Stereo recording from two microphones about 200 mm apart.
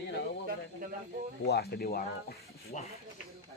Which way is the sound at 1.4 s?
55° left (ahead or behind).